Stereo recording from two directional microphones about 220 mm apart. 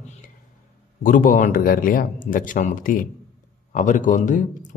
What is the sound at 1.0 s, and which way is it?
Speech, 40° left (ahead or behind).